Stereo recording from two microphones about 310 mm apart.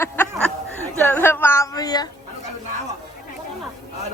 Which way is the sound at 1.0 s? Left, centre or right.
Centre.